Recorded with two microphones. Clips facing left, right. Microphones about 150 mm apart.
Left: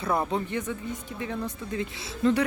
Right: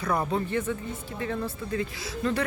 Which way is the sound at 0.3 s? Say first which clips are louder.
Right 2 dB; 20° left (ahead or behind).